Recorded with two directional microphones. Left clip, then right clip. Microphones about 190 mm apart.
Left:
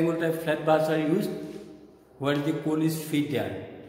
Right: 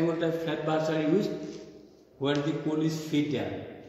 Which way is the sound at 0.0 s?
30° left (ahead or behind).